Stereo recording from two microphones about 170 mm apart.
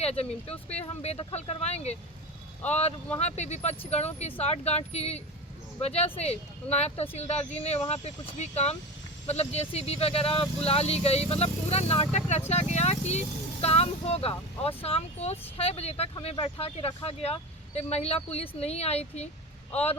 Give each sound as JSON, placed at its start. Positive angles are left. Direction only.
{"t": 0.0, "sound": "speech", "side_deg": 35}